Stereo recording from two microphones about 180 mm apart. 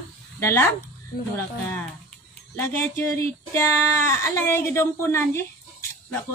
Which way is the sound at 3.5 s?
15° left (ahead or behind).